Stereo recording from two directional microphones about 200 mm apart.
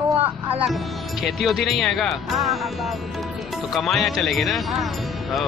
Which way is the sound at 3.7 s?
Centre (ahead or behind).